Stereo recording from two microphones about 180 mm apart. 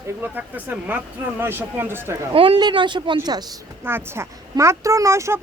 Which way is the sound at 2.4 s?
25° right (ahead or behind).